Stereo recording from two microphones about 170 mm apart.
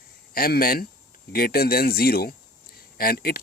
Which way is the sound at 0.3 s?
60° left (ahead or behind).